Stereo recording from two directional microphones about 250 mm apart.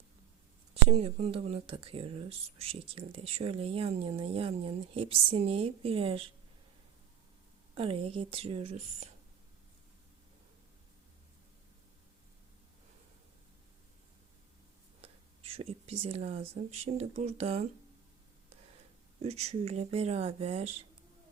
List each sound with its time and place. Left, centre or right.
0.7 s speech: right
7.8 s speech: right
15.0 s speech: right
19.2 s speech: right